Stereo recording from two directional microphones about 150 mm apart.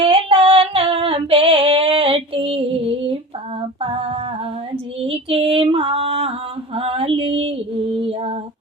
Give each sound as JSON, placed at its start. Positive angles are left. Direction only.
{"t": 0.0, "sound": "female singing", "side_deg": -40}
{"t": 3.8, "sound": "humming", "side_deg": -40}
{"t": 4.9, "sound": "female singing", "side_deg": -40}